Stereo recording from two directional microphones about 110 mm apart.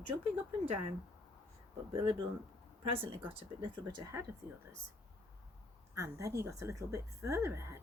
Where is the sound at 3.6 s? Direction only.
45° right (ahead or behind).